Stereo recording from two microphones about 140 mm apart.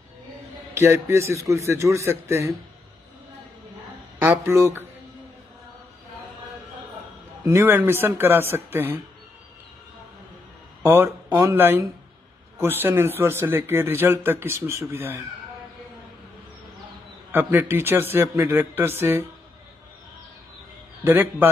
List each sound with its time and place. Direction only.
0.7 s a man's voice: 20° right (ahead or behind)
4.2 s a sound: 20° right (ahead or behind)
7.4 s a man's voice: 15° right (ahead or behind)
10.8 s a man's voice: 15° right (ahead or behind)
17.3 s a man's voice: 15° right (ahead or behind)
21.0 s a man's voice: 15° right (ahead or behind)